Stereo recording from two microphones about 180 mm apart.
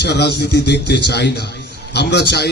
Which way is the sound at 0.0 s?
65° left (ahead or behind).